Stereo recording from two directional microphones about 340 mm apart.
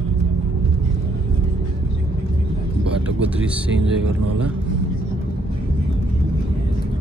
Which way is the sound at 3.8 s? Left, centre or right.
Right.